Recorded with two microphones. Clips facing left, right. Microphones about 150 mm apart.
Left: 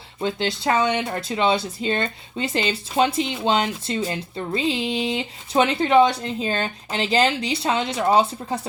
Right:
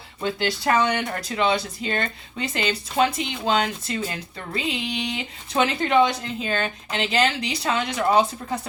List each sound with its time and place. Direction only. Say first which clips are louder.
0.2 s speech: left 1 dB; 25° left (ahead or behind)